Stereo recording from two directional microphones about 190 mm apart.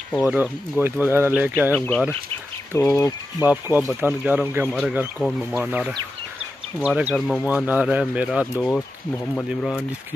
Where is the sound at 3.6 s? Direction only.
15° right (ahead or behind).